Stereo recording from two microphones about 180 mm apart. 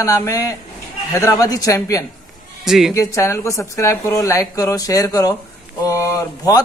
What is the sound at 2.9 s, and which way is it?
A man's voice, 20° left (ahead or behind).